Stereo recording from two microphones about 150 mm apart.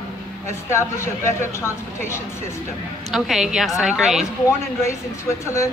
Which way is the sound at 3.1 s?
Centre (ahead or behind).